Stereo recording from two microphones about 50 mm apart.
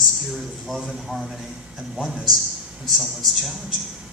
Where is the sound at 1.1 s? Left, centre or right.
Centre.